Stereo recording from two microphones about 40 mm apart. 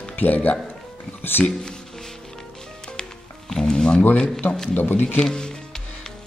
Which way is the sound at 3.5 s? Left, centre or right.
Centre.